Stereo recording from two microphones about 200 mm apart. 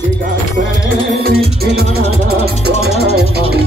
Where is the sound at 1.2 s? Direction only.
50° right (ahead or behind).